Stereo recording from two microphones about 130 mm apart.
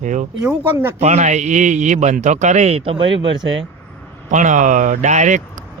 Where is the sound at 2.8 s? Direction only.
45° right (ahead or behind).